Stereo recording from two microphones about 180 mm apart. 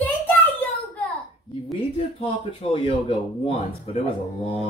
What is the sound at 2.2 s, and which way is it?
Speech, 30° left (ahead or behind).